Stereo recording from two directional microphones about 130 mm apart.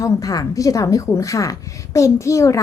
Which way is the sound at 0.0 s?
25° left (ahead or behind).